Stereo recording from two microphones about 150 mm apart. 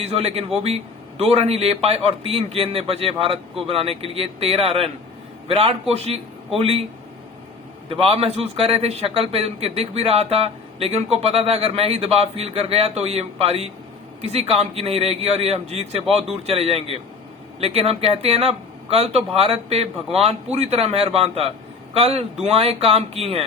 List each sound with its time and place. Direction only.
0.0 s a man's voice: 45° right (ahead or behind)
7.9 s a man's voice: 40° right (ahead or behind)